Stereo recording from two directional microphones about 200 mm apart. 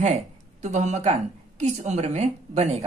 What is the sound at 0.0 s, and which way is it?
A woman's voice, 35° right (ahead or behind).